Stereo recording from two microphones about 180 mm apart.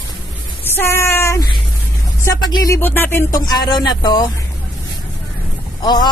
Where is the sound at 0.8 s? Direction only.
15° left (ahead or behind).